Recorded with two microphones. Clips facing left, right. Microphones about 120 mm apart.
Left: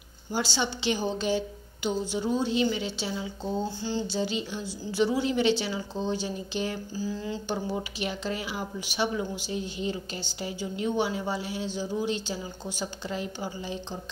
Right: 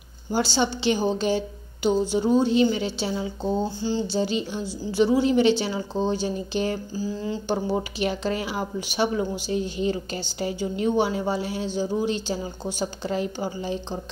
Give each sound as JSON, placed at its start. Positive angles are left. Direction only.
{"t": 0.6, "sound": "a woman's voice", "side_deg": -30}
{"t": 1.1, "sound": "a woman's voice", "side_deg": -45}
{"t": 3.8, "sound": "speech", "side_deg": -30}
{"t": 4.2, "sound": "a woman's voice", "side_deg": -40}
{"t": 4.9, "sound": "a woman's voice", "side_deg": -30}
{"t": 5.9, "sound": "speech", "side_deg": -45}
{"t": 9.8, "sound": "a woman's voice", "side_deg": -55}